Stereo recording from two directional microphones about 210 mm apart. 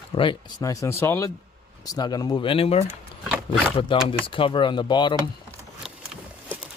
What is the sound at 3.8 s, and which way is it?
Speech, 25° left (ahead or behind).